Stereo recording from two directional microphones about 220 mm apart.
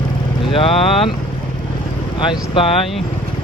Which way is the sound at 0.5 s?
25° left (ahead or behind).